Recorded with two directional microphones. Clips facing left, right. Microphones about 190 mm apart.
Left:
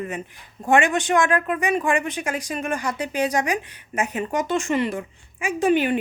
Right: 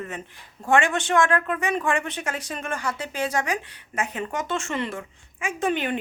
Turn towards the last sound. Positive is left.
turn(degrees=10)  # may be behind; listen again after turning